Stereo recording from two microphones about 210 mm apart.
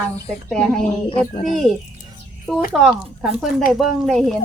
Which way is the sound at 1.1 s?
25° left (ahead or behind).